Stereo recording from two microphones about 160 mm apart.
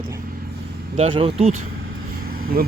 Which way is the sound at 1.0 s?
35° right (ahead or behind).